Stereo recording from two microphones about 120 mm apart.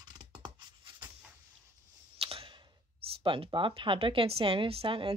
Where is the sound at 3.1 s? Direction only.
50° right (ahead or behind).